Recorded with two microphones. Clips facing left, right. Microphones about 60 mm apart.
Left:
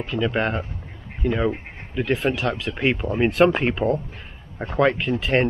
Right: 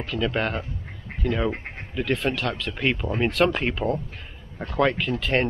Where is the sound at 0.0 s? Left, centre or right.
Centre.